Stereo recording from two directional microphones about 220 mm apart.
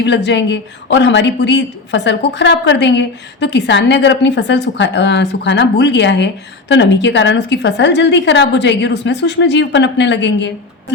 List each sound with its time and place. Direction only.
0.0 s speech: 50° left (ahead or behind)